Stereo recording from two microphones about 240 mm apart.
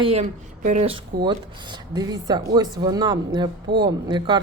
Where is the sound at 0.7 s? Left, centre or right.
Right.